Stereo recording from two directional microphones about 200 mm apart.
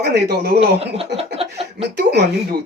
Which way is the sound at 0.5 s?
30° right (ahead or behind).